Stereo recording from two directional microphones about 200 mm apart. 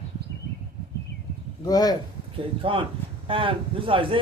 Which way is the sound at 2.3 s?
25° right (ahead or behind).